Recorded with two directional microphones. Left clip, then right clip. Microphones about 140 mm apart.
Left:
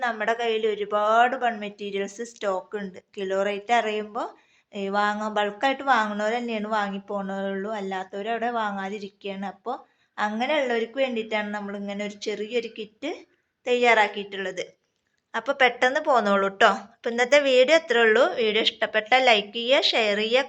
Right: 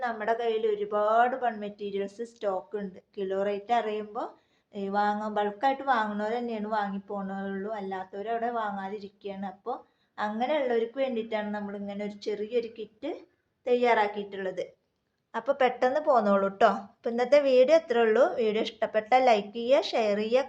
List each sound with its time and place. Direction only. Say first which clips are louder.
0.0 s a woman's voice: left 4 dB; 15° left (ahead or behind)
15.3 s a woman's voice: left 4 dB; centre (ahead or behind)